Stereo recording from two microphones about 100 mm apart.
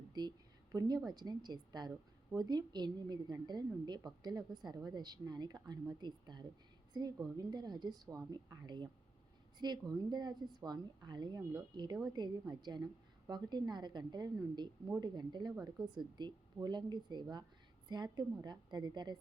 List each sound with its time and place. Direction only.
0.1 s a woman's voice: 45° right (ahead or behind)